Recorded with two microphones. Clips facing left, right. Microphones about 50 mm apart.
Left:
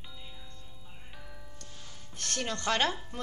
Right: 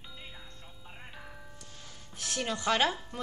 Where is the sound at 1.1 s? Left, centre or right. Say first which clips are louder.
Right 2 dB; right.